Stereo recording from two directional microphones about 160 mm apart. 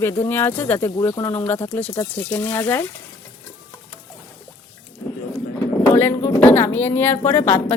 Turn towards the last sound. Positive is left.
turn(degrees=10)  # may be behind; listen again after turning